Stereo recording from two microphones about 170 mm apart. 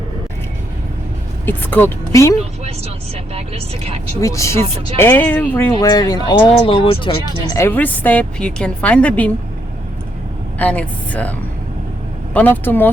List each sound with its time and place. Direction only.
1.5 s a woman's voice: 10° left (ahead or behind)
3.3 s a woman's voice: 35° right (ahead or behind)
4.2 s a woman's voice: 20° left (ahead or behind)
5.8 s speech: 25° left (ahead or behind)
7.5 s a woman's voice: 15° left (ahead or behind)
10.6 s a woman's voice: 10° left (ahead or behind)